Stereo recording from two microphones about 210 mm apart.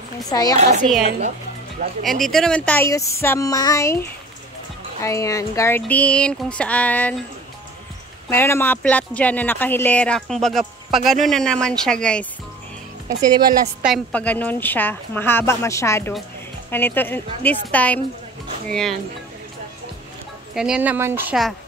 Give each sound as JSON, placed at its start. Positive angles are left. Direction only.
{"t": 0.3, "sound": "a woman's voice", "side_deg": 15}
{"t": 0.6, "sound": "a woman's voice", "side_deg": -35}
{"t": 2.0, "sound": "a woman's voice", "side_deg": 0}
{"t": 8.3, "sound": "speech", "side_deg": 10}
{"t": 13.8, "sound": "a woman's voice", "side_deg": 5}
{"t": 20.5, "sound": "a woman's voice", "side_deg": -5}